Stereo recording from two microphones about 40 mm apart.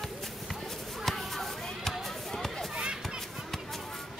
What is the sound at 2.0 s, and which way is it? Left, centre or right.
Basketball bounce, centre.